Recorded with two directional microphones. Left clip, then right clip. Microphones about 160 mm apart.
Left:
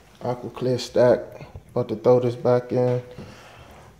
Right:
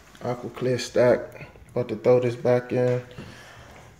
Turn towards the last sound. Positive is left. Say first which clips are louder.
# even
turn(degrees=10)  # may be behind; listen again after turning